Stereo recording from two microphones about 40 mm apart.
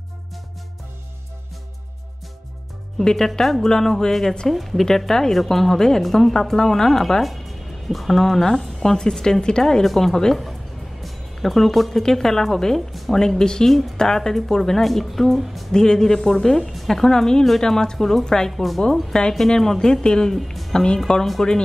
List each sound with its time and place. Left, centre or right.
3.0 s speech: centre
8.2 s speech: centre
11.0 s music: centre
12.0 s speech: centre
12.9 s a sound: centre
13.2 s speech: centre
13.7 s speech: centre
15.7 s speech: centre
18.2 s speech: centre
18.5 s speech: centre
18.8 s speech: centre
20.3 s music: centre
20.7 s speech: left